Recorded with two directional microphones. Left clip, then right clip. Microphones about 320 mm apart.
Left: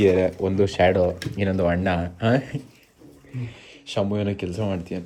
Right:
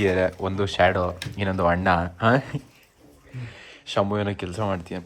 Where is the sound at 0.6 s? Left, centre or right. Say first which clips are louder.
Left 2 dB; centre.